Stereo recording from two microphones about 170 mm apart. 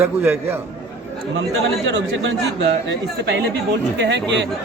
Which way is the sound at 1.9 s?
90° right.